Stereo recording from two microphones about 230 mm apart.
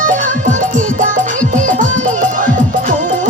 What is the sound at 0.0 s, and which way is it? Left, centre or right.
Music, right.